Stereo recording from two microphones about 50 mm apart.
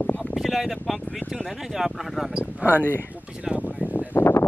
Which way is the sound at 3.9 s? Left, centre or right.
Left.